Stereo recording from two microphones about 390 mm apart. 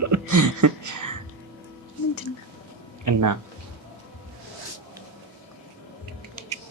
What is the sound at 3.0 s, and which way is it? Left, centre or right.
Speech, right.